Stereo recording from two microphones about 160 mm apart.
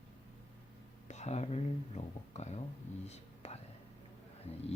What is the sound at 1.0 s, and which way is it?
Speech, 45° left (ahead or behind).